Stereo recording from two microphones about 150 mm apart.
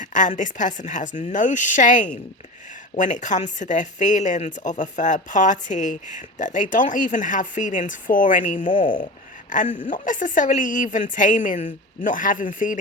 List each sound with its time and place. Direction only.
0.0 s speech: 55° left (ahead or behind)